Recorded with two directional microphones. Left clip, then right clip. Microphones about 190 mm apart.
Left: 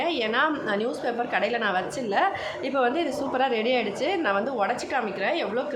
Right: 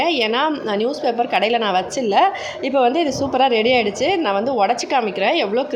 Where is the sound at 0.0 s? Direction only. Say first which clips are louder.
Right 6 dB; 25° right (ahead or behind).